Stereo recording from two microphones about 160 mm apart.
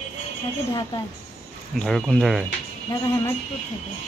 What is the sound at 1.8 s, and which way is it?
Speech, 5° left (ahead or behind).